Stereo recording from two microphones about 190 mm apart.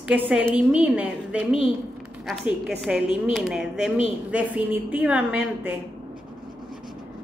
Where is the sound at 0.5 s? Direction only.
5° right (ahead or behind).